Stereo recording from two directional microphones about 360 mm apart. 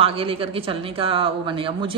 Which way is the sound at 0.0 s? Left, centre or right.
Centre.